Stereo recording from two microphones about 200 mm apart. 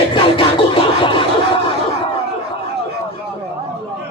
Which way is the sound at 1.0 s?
25° left (ahead or behind).